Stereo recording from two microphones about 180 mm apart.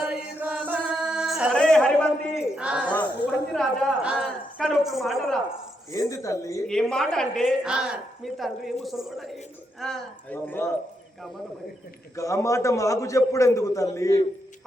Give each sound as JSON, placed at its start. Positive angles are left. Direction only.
{"t": 0.0, "sound": "chant", "side_deg": -5}
{"t": 3.2, "sound": "a woman's voice", "side_deg": 0}
{"t": 5.9, "sound": "a man's voice", "side_deg": 20}
{"t": 6.7, "sound": "a woman's voice", "side_deg": 5}
{"t": 12.1, "sound": "a man's voice", "side_deg": 15}